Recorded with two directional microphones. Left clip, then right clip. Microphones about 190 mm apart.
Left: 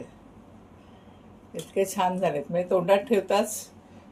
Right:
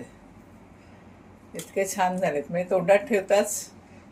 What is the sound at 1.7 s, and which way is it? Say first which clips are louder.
Speech: even; 15° left (ahead or behind).